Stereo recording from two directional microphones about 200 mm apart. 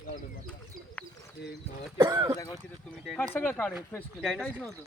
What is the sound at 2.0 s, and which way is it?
Speech, 20° right (ahead or behind).